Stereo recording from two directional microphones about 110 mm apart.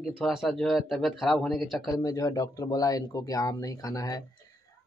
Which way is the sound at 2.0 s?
35° left (ahead or behind).